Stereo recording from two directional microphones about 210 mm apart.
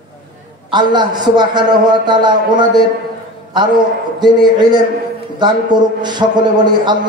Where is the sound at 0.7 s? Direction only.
20° right (ahead or behind).